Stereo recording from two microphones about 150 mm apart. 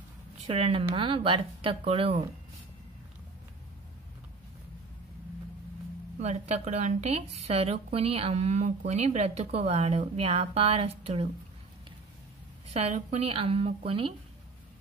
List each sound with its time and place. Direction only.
0.5 s speech: 40° right (ahead or behind)
6.1 s a woman's voice: 45° right (ahead or behind)
12.7 s speech: 45° right (ahead or behind)